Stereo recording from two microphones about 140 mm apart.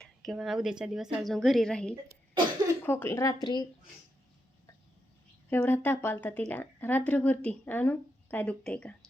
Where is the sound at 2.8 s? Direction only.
15° left (ahead or behind).